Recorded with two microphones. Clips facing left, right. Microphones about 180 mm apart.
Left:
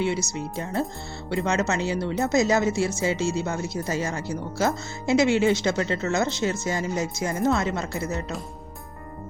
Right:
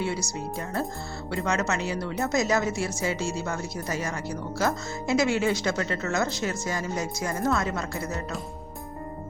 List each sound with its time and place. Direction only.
0.0 s speech: 20° left (ahead or behind)